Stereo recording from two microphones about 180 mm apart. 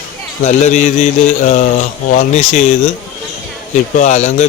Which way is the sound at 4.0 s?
40° left (ahead or behind).